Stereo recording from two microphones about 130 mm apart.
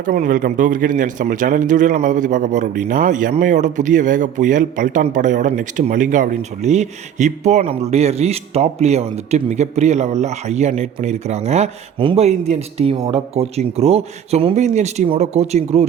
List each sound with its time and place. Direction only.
0.0 s a man's voice: 80° right; by 15.9 s 55° right (ahead or behind)